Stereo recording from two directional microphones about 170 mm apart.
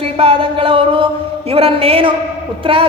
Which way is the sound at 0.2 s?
35° right (ahead or behind).